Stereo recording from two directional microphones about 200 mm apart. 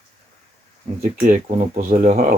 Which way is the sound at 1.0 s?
35° right (ahead or behind).